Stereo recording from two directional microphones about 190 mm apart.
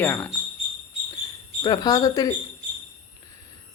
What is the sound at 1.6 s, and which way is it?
Speech, 20° left (ahead or behind).